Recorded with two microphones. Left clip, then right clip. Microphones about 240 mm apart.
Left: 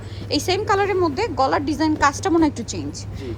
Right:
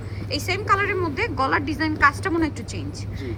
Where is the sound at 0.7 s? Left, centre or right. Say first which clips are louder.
Left 1 dB; centre.